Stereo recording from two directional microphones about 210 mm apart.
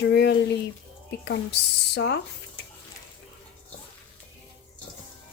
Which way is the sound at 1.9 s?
55° left (ahead or behind).